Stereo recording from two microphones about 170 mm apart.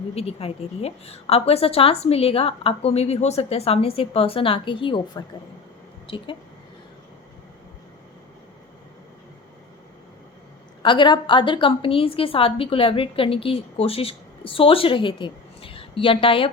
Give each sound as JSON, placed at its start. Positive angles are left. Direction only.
{"t": 0.1, "sound": "a woman's voice", "side_deg": 35}
{"t": 10.8, "sound": "a woman's voice", "side_deg": 25}